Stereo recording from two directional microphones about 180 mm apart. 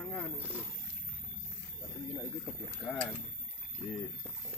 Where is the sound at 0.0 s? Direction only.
10° left (ahead or behind).